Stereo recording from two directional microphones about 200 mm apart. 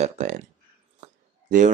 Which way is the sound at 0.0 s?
35° right (ahead or behind).